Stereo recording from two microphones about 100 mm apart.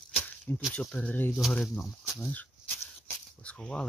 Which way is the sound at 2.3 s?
15° left (ahead or behind).